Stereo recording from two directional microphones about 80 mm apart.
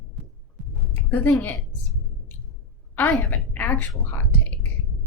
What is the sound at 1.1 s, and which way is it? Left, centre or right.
Speech, left.